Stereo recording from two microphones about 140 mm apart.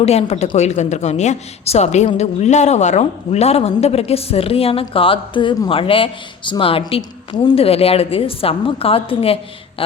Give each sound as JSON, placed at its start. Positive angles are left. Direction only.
{"t": 0.0, "sound": "a woman's voice", "side_deg": 50}